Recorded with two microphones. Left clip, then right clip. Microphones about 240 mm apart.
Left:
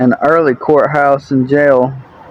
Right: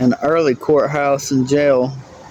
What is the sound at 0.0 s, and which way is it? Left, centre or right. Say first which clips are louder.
Speech: left 5 dB; centre.